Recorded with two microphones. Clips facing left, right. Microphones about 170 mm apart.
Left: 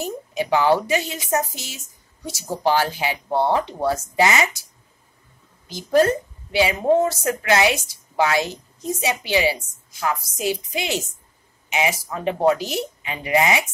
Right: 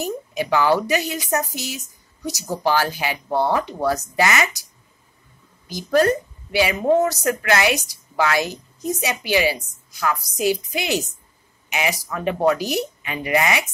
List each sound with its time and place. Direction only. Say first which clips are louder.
0.0 s speech: right 1 dB; 20° left (ahead or behind)
5.7 s speech: even; 25° left (ahead or behind)
12.1 s speech: right 1 dB; 20° left (ahead or behind)